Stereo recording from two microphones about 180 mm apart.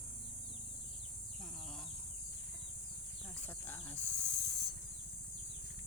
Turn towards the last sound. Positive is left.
turn(degrees=0)  # may be behind; listen again after turning